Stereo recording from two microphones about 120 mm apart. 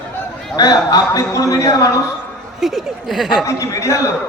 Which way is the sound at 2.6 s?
Centre (ahead or behind).